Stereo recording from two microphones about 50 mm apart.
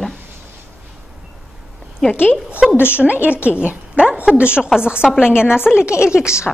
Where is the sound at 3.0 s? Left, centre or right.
Right.